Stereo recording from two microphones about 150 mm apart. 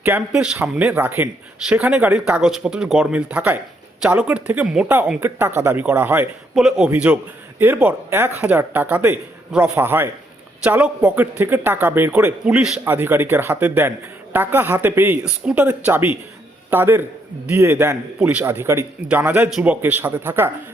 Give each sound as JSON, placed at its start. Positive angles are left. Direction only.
{"t": 0.0, "sound": "a man's voice", "side_deg": -10}